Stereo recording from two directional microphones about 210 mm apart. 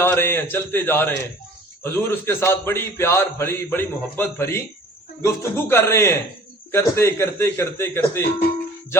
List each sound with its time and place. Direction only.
0.0 s a man's voice: 10° left (ahead or behind)